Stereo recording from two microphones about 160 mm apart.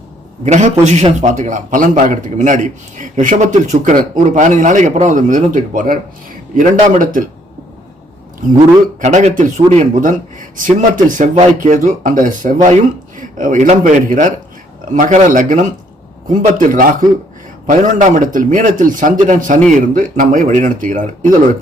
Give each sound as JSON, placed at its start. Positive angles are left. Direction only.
{"t": 0.4, "sound": "a man's voice", "side_deg": -45}
{"t": 9.0, "sound": "a man's voice", "side_deg": -50}